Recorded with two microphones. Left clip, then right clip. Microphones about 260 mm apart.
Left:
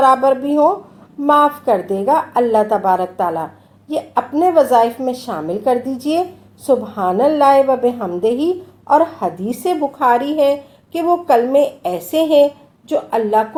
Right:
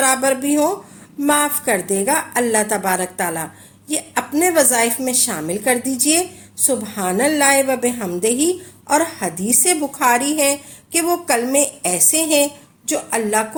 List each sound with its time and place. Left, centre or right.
0.0 s a woman's voice: right